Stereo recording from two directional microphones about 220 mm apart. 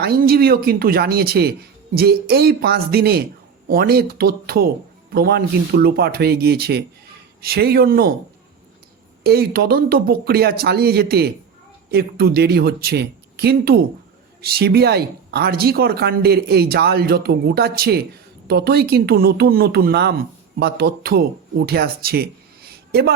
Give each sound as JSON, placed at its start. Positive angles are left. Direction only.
{"t": 0.0, "sound": "speech", "side_deg": -45}
{"t": 9.2, "sound": "speech", "side_deg": -45}